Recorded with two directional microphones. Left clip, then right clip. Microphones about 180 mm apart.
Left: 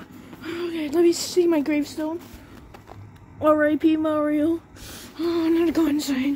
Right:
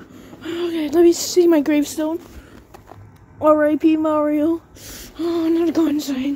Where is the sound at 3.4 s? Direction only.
10° right (ahead or behind).